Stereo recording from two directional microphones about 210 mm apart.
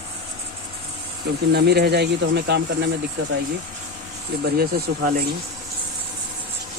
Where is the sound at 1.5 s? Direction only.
50° right (ahead or behind).